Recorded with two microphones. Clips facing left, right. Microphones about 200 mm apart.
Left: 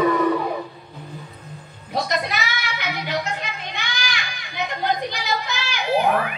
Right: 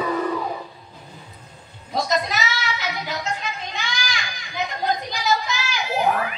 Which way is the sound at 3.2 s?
60° left (ahead or behind).